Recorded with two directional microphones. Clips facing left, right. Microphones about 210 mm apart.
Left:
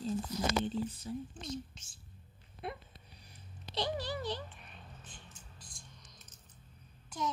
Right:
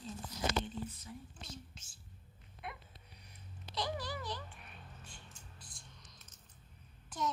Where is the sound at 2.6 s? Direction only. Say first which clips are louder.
Left 6 dB; 30° left (ahead or behind).